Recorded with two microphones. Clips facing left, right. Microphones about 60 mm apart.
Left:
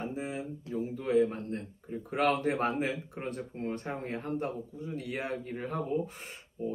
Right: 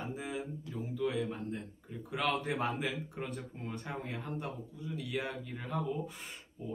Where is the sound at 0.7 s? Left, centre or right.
Left.